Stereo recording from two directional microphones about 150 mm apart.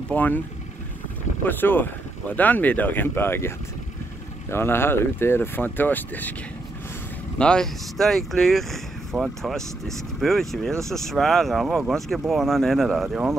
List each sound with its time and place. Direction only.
0.1 s speech: 10° left (ahead or behind)
1.4 s speech: 15° left (ahead or behind)
7.3 s speech: 5° left (ahead or behind)